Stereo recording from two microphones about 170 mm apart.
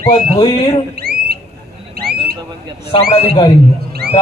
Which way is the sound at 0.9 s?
65° right (ahead or behind).